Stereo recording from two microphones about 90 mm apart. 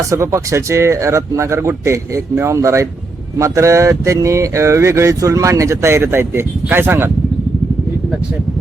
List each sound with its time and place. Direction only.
0.0 s speech: 35° right (ahead or behind)